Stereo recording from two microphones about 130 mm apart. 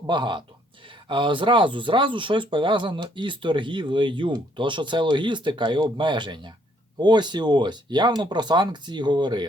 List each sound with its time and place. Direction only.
0.1 s speech: 35° right (ahead or behind)